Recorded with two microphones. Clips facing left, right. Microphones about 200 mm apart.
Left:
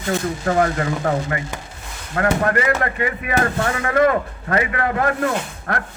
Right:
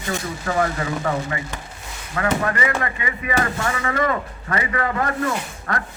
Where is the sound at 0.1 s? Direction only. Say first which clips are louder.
Left 5 dB; 50° left (ahead or behind).